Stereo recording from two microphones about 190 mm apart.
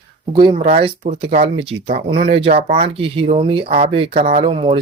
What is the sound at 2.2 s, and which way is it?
Speech, 60° right (ahead or behind).